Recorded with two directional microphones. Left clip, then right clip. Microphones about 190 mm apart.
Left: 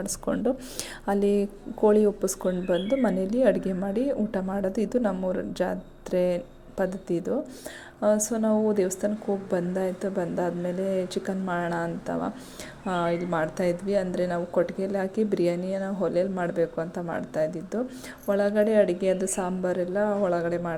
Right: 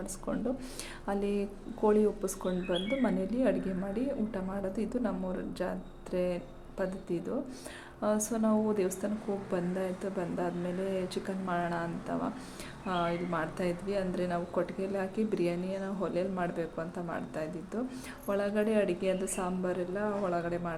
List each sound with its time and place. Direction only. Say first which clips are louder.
0.0 s speech: left 8 dB; 35° left (ahead or behind)